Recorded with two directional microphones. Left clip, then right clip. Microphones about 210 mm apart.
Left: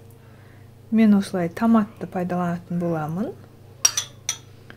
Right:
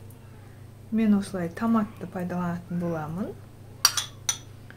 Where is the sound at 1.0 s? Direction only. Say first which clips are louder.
Left 6 dB; 40° left (ahead or behind).